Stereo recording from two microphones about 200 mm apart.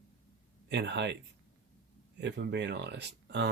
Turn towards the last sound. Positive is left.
turn(degrees=-60)  # may be behind; listen again after turning